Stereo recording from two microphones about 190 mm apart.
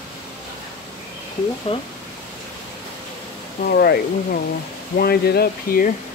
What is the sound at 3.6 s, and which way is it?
Speech, 55° left (ahead or behind).